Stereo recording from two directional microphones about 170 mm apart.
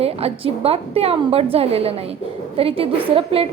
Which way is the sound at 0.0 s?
35° right (ahead or behind).